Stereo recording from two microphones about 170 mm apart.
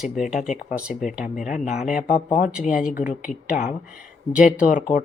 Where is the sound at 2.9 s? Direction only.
50° left (ahead or behind).